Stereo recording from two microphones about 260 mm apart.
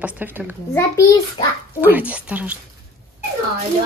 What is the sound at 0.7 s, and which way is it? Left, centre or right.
Speech, centre.